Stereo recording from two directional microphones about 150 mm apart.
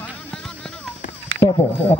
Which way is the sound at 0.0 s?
10° left (ahead or behind).